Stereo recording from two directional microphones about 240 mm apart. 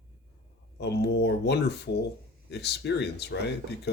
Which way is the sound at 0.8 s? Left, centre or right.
Left.